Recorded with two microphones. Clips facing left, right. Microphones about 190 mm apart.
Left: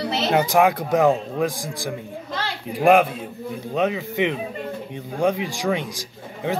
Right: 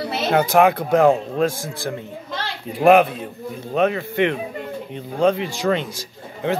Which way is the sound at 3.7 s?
65° right (ahead or behind).